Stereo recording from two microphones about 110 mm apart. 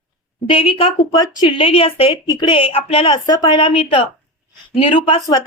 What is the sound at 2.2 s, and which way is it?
Speech, 40° left (ahead or behind).